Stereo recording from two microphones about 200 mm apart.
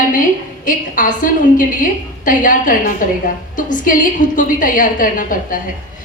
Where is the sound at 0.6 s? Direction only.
40° left (ahead or behind).